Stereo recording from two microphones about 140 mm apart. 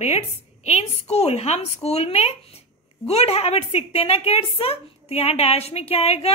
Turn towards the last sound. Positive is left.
turn(degrees=45)  # may be behind; listen again after turning